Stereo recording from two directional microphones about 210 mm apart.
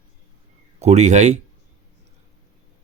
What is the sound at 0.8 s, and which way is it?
Speech, 35° right (ahead or behind).